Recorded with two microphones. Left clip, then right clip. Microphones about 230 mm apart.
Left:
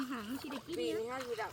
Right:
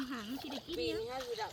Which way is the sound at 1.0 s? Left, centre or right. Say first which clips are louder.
Left 1 dB; left.